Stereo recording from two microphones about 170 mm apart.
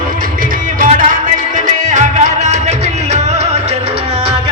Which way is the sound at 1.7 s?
45° right (ahead or behind).